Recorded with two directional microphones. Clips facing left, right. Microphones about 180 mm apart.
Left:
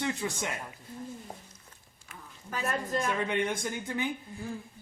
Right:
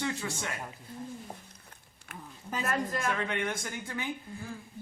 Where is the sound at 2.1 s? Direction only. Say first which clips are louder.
Right 3 dB; 60° right (ahead or behind).